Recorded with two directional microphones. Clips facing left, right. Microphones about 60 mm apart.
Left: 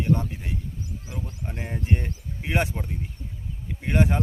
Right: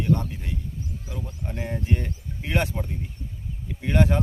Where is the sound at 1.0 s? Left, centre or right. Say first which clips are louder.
Even; centre.